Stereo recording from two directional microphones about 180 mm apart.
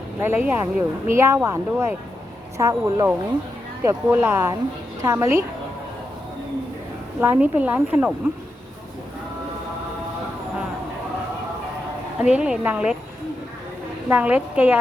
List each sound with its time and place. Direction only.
0.2 s speech: 10° right (ahead or behind)
7.2 s speech: 10° right (ahead or behind)
12.3 s speech: 5° right (ahead or behind)
14.1 s speech: 10° right (ahead or behind)